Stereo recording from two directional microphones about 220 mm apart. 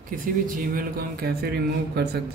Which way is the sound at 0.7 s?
45° right (ahead or behind).